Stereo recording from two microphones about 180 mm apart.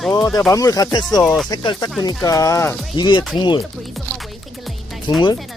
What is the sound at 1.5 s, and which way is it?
Speech, 25° left (ahead or behind).